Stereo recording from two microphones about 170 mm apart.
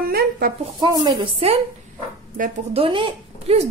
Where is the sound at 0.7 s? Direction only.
25° right (ahead or behind).